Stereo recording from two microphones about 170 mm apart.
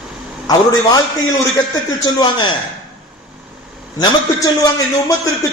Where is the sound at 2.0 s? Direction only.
25° left (ahead or behind).